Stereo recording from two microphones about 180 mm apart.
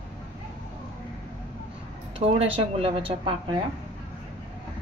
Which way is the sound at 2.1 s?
30° right (ahead or behind).